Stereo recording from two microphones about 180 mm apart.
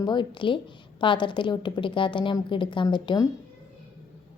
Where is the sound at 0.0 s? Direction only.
25° left (ahead or behind).